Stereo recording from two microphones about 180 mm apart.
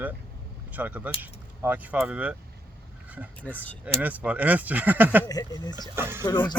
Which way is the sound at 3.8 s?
10° right (ahead or behind).